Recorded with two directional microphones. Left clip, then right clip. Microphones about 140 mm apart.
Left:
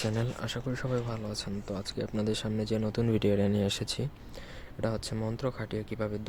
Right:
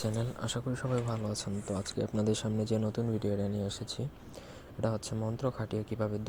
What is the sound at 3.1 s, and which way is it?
Speech, 40° left (ahead or behind).